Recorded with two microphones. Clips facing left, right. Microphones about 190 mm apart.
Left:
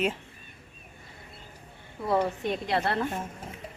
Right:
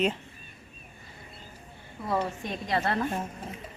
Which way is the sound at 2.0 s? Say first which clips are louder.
Left 3 dB; 10° left (ahead or behind).